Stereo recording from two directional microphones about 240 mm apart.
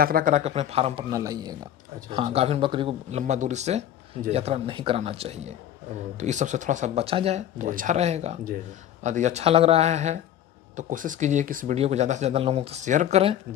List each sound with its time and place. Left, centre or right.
0.0 s speech: right
1.1 s speech: centre